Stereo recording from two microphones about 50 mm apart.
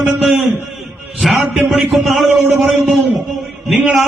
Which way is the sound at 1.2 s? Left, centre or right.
Centre.